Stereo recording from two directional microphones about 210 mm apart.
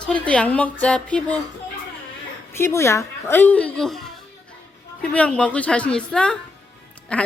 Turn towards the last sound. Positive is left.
turn(degrees=5)  # may be behind; listen again after turning